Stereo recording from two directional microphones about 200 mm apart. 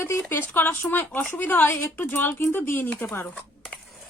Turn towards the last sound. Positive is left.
turn(degrees=10)  # may be behind; listen again after turning